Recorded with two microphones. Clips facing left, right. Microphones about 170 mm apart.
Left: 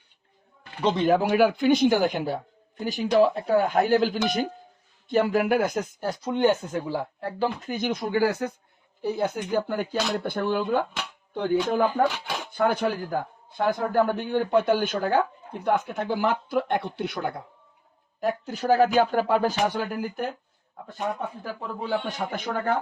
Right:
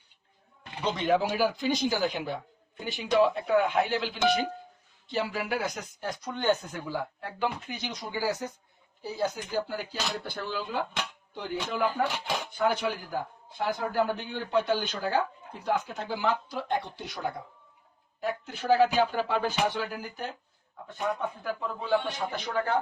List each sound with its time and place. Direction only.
0.9 s a man's voice: 45° left (ahead or behind)
6.1 s a man's voice: 25° left (ahead or behind); by 17.4 s 60° left (ahead or behind)
18.2 s a man's voice: 40° left (ahead or behind)
20.8 s speech: 40° left (ahead or behind)
22.3 s a man's voice: 50° left (ahead or behind)